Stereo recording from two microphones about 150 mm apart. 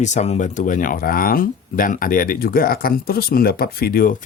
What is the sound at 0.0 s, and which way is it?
Speech, 50° left (ahead or behind).